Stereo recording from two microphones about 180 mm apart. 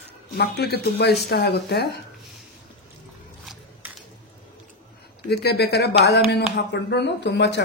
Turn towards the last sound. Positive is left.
turn(degrees=70)  # may be behind; listen again after turning